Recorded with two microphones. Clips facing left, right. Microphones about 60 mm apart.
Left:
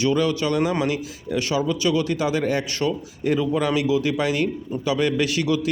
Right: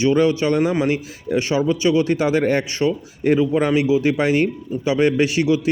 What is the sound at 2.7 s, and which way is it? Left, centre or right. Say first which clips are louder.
A man's voice: right 4 dB; right.